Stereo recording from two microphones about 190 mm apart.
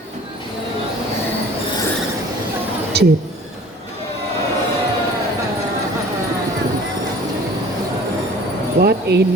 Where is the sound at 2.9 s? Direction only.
60° right (ahead or behind).